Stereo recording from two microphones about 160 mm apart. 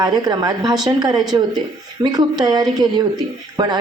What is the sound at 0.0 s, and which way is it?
A woman's voice, 25° right (ahead or behind).